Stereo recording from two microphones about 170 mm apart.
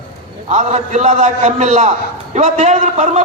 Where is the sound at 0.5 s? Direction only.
40° right (ahead or behind).